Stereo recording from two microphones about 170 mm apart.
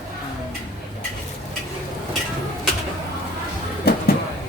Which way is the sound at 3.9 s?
70° left (ahead or behind).